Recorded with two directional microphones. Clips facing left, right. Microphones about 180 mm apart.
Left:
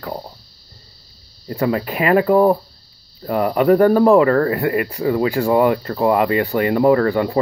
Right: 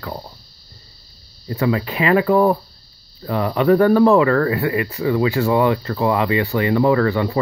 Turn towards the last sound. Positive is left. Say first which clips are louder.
# left 2 dB
turn(degrees=35)  # may be behind; listen again after turning